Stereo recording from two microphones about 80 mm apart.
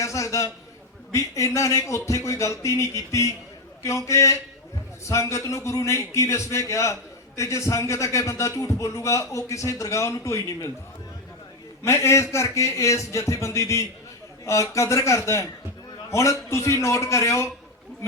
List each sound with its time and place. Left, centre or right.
0.0 s a sound: left
1.1 s a man's voice: left
11.8 s a man's voice: left